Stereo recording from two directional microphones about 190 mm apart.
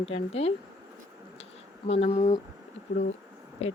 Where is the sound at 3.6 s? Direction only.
30° left (ahead or behind).